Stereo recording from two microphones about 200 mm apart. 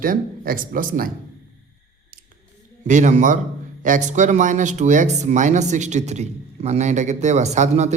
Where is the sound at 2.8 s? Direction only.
40° right (ahead or behind).